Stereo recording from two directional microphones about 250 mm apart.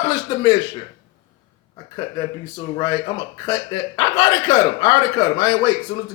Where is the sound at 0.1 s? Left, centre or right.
Centre.